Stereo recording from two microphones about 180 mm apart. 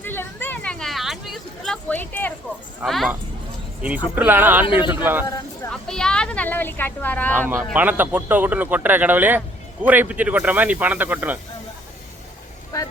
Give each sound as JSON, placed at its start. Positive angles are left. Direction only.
{"t": 0.0, "sound": "a sound", "side_deg": 10}
{"t": 2.8, "sound": "speech", "side_deg": 0}
{"t": 4.6, "sound": "speech", "side_deg": 30}
{"t": 4.9, "sound": "speech", "side_deg": -10}
{"t": 5.7, "sound": "a woman's voice", "side_deg": 5}
{"t": 7.5, "sound": "speech", "side_deg": -10}